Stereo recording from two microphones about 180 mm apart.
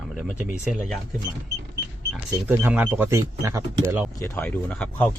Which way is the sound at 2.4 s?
10° right (ahead or behind).